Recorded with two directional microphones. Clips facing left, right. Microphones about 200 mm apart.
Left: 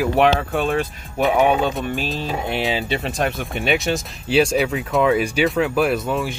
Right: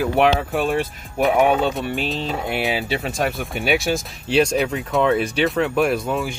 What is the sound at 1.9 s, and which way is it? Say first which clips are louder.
Speech: right 1 dB; 20° right (ahead or behind).